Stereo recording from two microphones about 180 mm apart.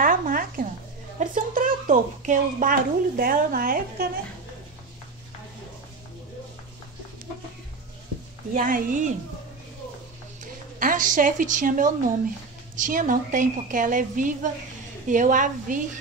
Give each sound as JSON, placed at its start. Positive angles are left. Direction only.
{"t": 0.0, "sound": "a sound", "side_deg": -50}
{"t": 1.2, "sound": "speech", "side_deg": -50}
{"t": 8.5, "sound": "a woman's voice", "side_deg": -50}
{"t": 10.4, "sound": "a woman's voice", "side_deg": -50}